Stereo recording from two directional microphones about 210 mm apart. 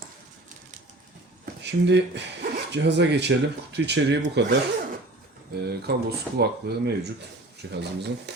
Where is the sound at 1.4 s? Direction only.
55° right (ahead or behind).